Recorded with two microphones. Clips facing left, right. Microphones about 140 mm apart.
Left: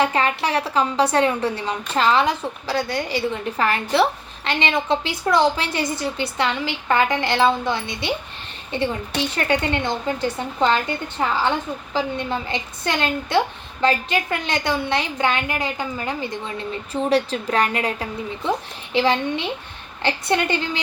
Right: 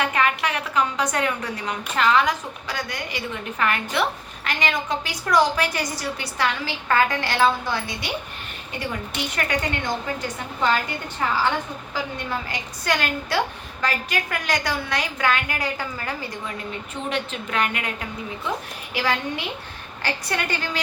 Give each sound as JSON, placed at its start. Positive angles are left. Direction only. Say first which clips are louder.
{"t": 0.0, "sound": "a woman's voice", "louder": "left 3 dB", "side_deg": 30}
{"t": 16.9, "sound": "a woman's voice", "louder": "left 9 dB", "side_deg": 35}